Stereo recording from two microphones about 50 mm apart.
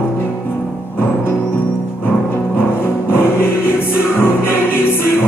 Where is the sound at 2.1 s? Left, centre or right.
Left.